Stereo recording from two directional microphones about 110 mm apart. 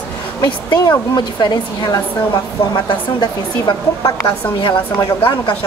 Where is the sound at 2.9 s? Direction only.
45° left (ahead or behind).